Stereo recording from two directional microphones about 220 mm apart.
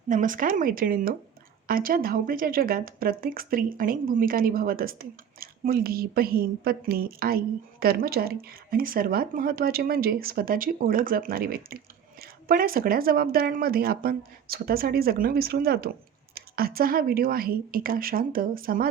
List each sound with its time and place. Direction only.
0.1 s speech: 35° right (ahead or behind)